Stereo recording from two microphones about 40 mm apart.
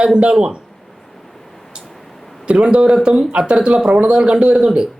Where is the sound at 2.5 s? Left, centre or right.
Right.